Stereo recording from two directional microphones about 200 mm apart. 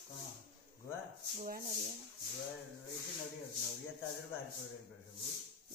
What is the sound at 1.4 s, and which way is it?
Speech, 45° right (ahead or behind).